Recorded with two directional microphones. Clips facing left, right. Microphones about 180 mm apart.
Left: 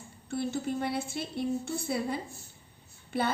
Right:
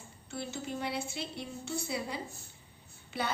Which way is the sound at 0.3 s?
55° left (ahead or behind).